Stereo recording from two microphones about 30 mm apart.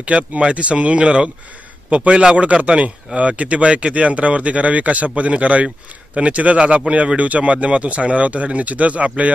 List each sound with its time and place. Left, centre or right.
0.4 s speech: right